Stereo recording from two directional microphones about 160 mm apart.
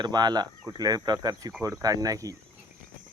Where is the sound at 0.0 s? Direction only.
25° right (ahead or behind).